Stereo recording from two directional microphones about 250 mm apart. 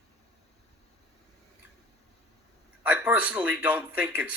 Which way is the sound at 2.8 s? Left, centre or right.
Centre.